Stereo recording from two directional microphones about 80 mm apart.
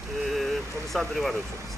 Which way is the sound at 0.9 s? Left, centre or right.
Centre.